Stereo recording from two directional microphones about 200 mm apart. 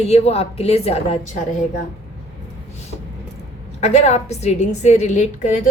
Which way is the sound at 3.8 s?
35° left (ahead or behind).